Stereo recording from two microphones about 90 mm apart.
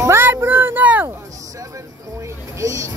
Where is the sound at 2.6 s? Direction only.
35° right (ahead or behind).